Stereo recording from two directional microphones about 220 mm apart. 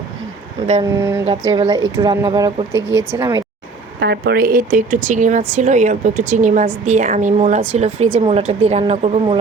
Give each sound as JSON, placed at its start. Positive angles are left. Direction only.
{"t": 0.9, "sound": "speech", "side_deg": -10}
{"t": 1.2, "sound": "a woman's voice", "side_deg": -30}
{"t": 4.0, "sound": "a woman's voice", "side_deg": -50}